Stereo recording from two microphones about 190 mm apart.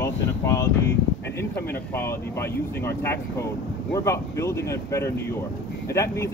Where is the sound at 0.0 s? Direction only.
15° left (ahead or behind).